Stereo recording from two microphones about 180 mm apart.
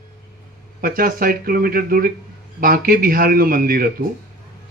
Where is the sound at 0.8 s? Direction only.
55° right (ahead or behind).